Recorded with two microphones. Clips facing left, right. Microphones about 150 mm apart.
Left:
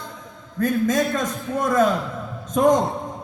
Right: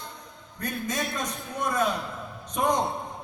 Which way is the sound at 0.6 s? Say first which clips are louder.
Left 11 dB; 90° left.